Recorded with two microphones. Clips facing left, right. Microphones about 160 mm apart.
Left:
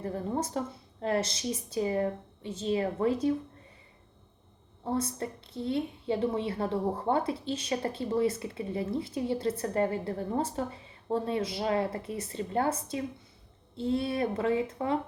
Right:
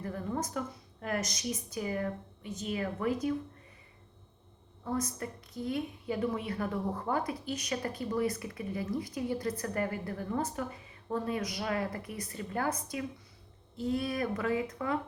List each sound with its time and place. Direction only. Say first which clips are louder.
0.0 s a woman's voice: left 3 dB; 30° left (ahead or behind)
4.8 s a woman's voice: left 3 dB; 30° left (ahead or behind)